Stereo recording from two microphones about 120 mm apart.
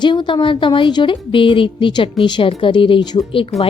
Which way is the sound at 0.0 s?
40° left (ahead or behind).